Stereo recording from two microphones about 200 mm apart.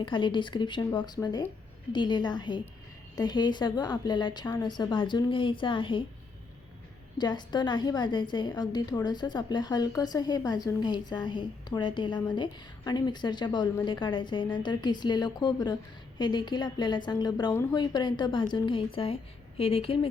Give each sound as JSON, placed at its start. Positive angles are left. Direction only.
{"t": 0.0, "sound": "a woman's voice", "side_deg": 25}
{"t": 7.2, "sound": "a woman's voice", "side_deg": 20}